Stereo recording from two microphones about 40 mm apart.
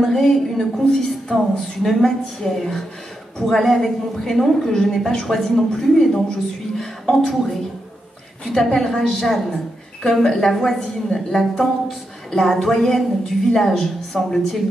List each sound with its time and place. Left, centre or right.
0.0 s a woman's voice: centre
8.6 s a woman's voice: centre